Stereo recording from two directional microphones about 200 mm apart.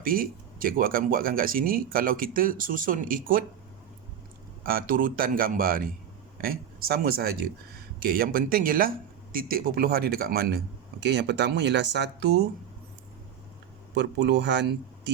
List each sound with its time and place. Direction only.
0.0 s speech: 45° right (ahead or behind)
4.6 s speech: 45° right (ahead or behind)
13.9 s speech: 60° right (ahead or behind)